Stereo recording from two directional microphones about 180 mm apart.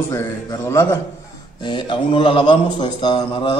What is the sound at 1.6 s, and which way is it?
Speech, 25° left (ahead or behind).